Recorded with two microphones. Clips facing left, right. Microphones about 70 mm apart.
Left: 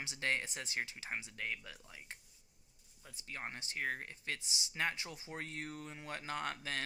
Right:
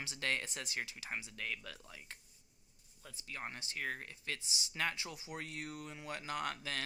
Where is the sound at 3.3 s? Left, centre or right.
Left.